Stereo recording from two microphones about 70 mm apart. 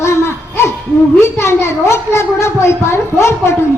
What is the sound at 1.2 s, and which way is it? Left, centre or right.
A woman's voice, left.